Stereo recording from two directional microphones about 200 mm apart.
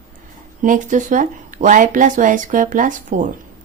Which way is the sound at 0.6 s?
40° right (ahead or behind).